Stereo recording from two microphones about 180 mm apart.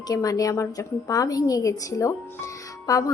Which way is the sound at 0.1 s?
20° left (ahead or behind).